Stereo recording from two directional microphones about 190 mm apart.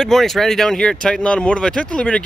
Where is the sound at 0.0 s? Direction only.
Centre (ahead or behind).